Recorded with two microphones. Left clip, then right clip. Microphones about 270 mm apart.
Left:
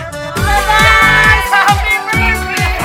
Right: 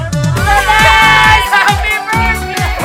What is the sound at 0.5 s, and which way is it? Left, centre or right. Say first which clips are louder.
Music: right 1 dB; centre.